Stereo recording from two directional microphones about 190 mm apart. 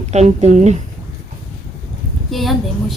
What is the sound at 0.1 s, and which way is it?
Speech, 35° right (ahead or behind).